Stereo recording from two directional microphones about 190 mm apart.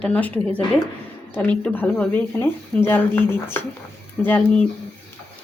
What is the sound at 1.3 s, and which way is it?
Speech, 10° left (ahead or behind).